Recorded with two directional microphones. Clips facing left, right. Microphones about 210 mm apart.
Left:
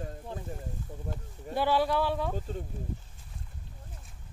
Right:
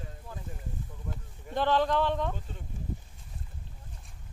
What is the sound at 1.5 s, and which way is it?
Speech, 10° left (ahead or behind).